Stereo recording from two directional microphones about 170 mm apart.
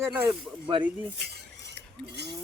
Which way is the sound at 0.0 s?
15° right (ahead or behind).